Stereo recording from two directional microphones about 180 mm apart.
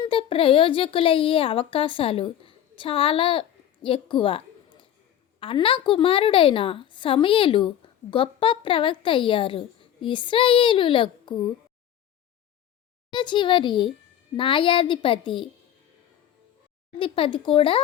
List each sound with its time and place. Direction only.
0.0 s a woman's voice: 30° left (ahead or behind)
13.1 s a woman's voice: 25° left (ahead or behind)
17.0 s a woman's voice: 30° left (ahead or behind)